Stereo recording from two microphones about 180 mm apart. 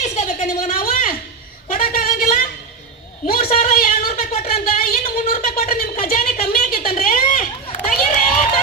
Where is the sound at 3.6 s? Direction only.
50° left (ahead or behind).